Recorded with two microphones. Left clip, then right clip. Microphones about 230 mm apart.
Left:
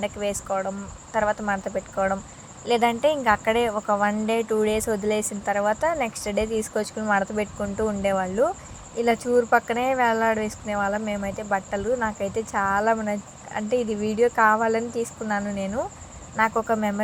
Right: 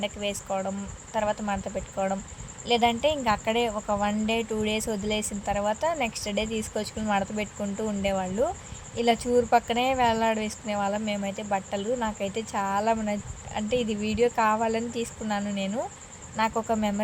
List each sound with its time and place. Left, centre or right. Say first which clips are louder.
0.0 s speech: left 3 dB; centre
13.7 s a woman's voice: left 3 dB; left
14.2 s a woman's voice: left 4 dB; centre